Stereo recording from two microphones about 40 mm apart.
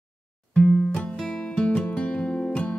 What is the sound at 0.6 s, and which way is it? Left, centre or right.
Music, left.